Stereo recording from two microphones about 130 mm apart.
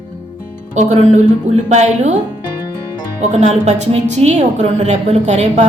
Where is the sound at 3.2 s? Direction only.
60° right (ahead or behind).